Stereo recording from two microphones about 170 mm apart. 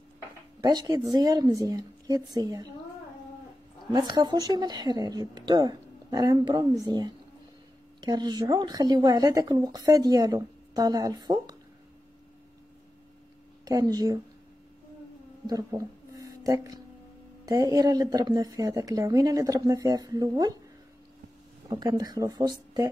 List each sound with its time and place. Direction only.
0.6 s speech: 25° right (ahead or behind)
3.9 s speech: 25° right (ahead or behind)
13.7 s speech: 20° right (ahead or behind)
15.4 s a sound: 20° right (ahead or behind)
17.5 s speech: 20° right (ahead or behind)
21.6 s speech: 20° right (ahead or behind)